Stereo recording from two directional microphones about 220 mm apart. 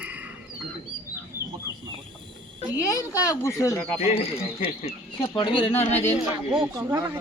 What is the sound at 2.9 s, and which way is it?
Speech, 15° left (ahead or behind).